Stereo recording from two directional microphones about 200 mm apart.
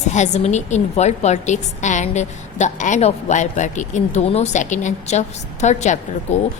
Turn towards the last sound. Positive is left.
turn(degrees=35)  # may be behind; listen again after turning